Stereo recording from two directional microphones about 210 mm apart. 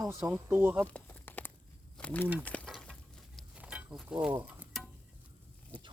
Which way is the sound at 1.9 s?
5° left (ahead or behind).